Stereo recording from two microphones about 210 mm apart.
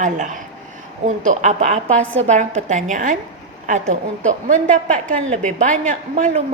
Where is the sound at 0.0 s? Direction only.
40° right (ahead or behind).